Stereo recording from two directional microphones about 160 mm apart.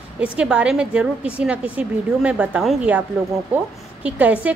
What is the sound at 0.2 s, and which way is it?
A woman's voice, 5° right (ahead or behind).